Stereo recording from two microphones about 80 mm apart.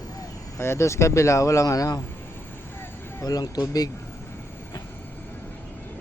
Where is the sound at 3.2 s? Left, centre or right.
Left.